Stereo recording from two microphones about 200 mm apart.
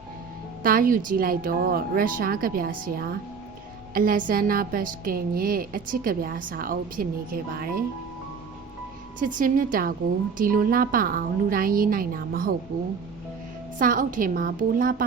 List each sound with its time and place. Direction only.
0.6 s a woman's voice: 45° right (ahead or behind)
9.2 s a woman's voice: 40° right (ahead or behind)
13.7 s a woman's voice: 45° right (ahead or behind)